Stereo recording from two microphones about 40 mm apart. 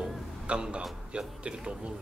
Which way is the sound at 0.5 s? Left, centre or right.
Right.